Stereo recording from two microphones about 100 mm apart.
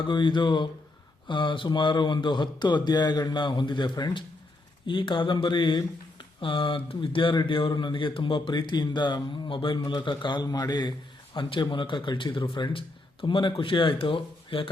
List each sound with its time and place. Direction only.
0.1 s speech: 50° left (ahead or behind)